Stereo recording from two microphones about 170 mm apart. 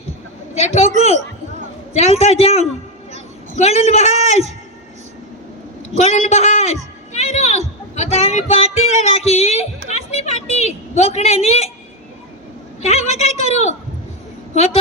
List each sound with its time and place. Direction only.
0.5 s speech: 40° left (ahead or behind)
1.9 s speech: 40° left (ahead or behind)
6.0 s a man's voice: 40° left (ahead or behind)
12.8 s speech: 40° left (ahead or behind)